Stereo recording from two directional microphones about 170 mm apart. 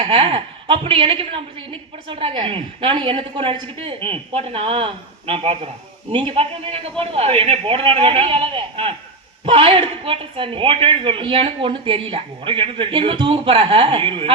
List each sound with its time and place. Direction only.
0.0 s speech: 30° right (ahead or behind)